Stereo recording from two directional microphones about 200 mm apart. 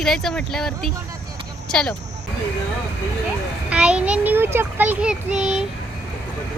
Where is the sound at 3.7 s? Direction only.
5° right (ahead or behind).